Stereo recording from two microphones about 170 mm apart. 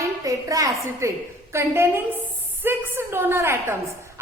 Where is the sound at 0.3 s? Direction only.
20° right (ahead or behind).